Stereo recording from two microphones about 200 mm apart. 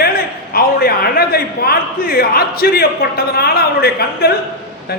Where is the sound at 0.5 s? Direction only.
50° left (ahead or behind).